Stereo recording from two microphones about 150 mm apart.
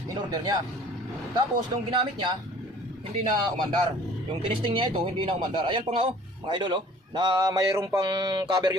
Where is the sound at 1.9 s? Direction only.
35° right (ahead or behind).